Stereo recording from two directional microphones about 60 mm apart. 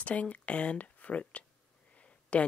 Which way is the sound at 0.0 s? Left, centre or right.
Left.